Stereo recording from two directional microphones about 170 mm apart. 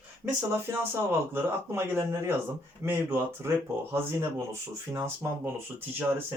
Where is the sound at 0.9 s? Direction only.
15° right (ahead or behind).